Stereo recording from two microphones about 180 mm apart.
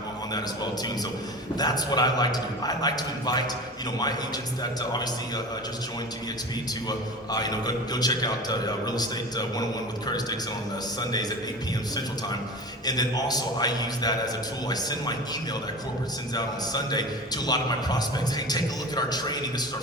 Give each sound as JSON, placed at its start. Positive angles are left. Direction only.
{"t": 1.5, "sound": "a man's voice", "side_deg": 20}
{"t": 4.8, "sound": "a man's voice", "side_deg": 25}
{"t": 6.8, "sound": "a man's voice", "side_deg": 20}
{"t": 12.8, "sound": "a man's voice", "side_deg": 20}
{"t": 16.3, "sound": "a man's voice", "side_deg": 20}